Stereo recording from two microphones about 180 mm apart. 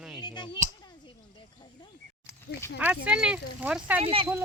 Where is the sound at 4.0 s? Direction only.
30° right (ahead or behind).